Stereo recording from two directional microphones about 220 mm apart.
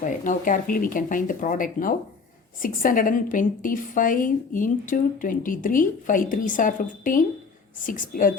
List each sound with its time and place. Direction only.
0.0 s a woman's voice: 35° left (ahead or behind)